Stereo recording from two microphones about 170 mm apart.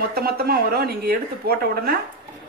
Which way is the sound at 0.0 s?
65° right (ahead or behind).